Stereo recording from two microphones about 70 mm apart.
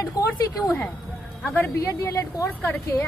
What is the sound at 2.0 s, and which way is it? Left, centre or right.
Speech, left.